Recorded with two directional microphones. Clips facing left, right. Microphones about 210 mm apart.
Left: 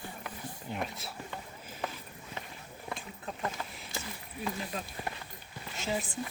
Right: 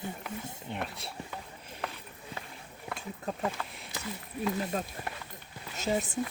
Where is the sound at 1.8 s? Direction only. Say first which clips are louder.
Left 1 dB; centre (ahead or behind).